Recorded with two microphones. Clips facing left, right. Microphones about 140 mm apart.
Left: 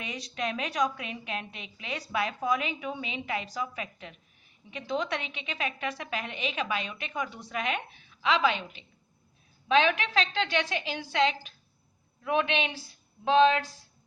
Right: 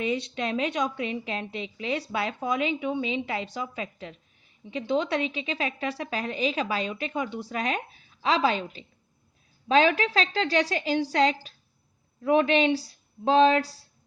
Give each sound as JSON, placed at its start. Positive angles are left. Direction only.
{"t": 0.0, "sound": "a woman's voice", "side_deg": -30}